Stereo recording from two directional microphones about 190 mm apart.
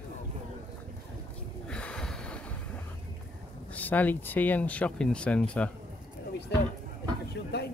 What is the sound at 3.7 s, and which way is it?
Speech, 10° left (ahead or behind).